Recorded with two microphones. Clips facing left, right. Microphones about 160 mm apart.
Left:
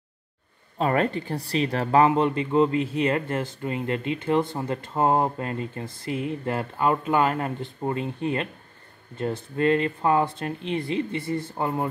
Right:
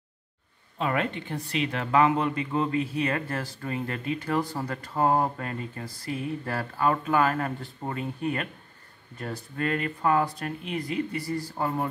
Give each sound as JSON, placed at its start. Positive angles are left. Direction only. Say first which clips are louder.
{"t": 0.7, "sound": "speech", "louder": "left 5 dB", "side_deg": 40}